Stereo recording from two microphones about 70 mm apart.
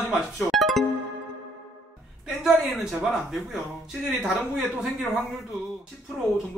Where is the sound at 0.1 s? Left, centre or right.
Centre.